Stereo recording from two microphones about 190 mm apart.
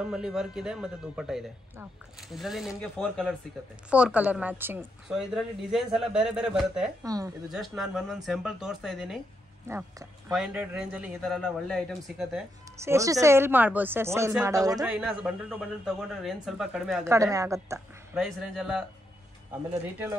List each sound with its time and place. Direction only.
0.0 s a woman's voice: 5° right (ahead or behind)
7.0 s a woman's voice: 20° right (ahead or behind)
7.4 s a woman's voice: centre (ahead or behind)
9.7 s a woman's voice: 10° right (ahead or behind)
12.8 s a woman's voice: 15° right (ahead or behind)
14.9 s a woman's voice: 5° right (ahead or behind)
17.0 s a woman's voice: 15° right (ahead or behind)
17.7 s a woman's voice: 5° right (ahead or behind)